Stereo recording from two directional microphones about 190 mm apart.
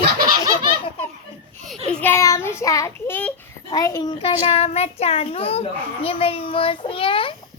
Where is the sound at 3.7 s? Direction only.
20° left (ahead or behind).